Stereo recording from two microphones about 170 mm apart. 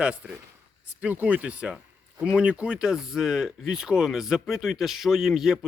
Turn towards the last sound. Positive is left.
turn(degrees=-5)  # may be behind; listen again after turning